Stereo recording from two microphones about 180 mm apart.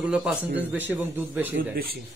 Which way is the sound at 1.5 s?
60° right (ahead or behind).